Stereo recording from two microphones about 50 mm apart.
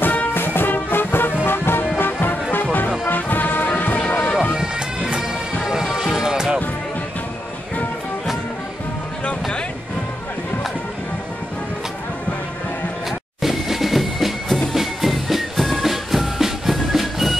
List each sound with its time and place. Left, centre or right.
0.0 s music: left
3.1 s music: left
4.0 s music: centre
4.4 s bagpipes: centre
5.6 s music: centre
13.4 s music: centre